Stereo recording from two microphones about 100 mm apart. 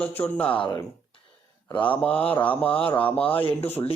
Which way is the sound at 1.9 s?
15° left (ahead or behind).